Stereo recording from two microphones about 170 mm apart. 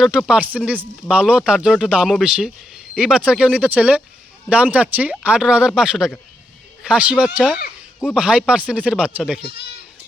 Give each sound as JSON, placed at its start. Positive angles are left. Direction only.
{"t": 0.0, "sound": "speech", "side_deg": -5}
{"t": 9.5, "sound": "bleat", "side_deg": 70}